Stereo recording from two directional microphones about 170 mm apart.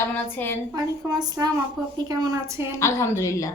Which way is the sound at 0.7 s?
20° right (ahead or behind).